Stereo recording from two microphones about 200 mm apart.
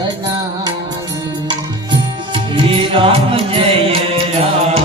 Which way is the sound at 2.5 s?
25° right (ahead or behind).